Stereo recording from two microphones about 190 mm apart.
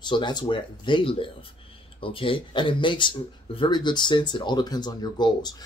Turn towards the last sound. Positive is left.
turn(degrees=20)  # may be behind; listen again after turning